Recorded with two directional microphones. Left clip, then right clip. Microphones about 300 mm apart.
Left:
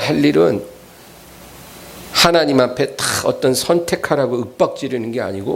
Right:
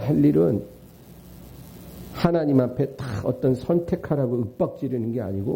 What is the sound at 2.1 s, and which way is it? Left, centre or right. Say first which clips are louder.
Speech: left 10 dB; centre.